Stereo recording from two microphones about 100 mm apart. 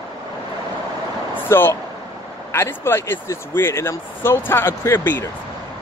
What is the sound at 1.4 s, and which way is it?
Speech, 20° left (ahead or behind).